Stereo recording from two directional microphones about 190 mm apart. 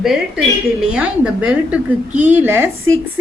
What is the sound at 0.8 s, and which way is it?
A woman's voice, 5° right (ahead or behind).